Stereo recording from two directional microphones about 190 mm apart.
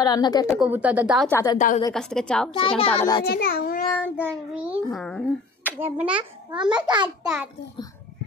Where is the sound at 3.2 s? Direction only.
55° left (ahead or behind).